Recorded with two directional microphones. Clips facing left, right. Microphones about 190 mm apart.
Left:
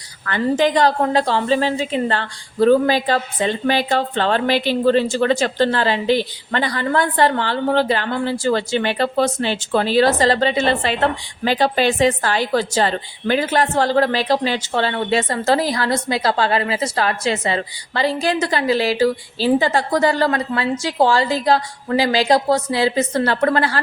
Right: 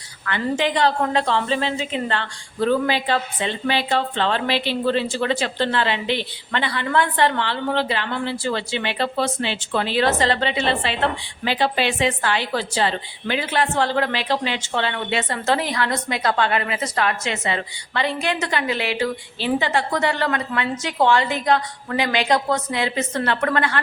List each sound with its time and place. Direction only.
0.3 s a woman's voice: 40° left (ahead or behind)